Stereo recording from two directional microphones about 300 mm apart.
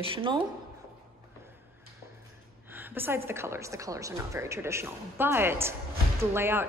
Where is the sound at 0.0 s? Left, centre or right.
Centre.